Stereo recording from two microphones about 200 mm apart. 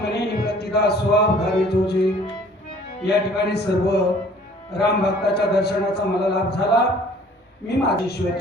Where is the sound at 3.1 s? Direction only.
55° left (ahead or behind).